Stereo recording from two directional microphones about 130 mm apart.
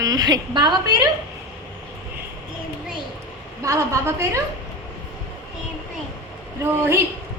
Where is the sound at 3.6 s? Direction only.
25° right (ahead or behind).